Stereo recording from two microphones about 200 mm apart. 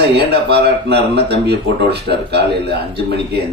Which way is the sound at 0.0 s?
55° right (ahead or behind).